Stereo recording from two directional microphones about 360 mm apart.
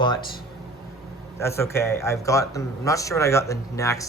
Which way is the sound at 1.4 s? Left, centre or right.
Centre.